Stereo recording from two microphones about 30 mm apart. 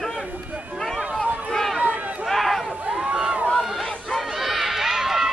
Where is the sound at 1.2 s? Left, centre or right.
Right.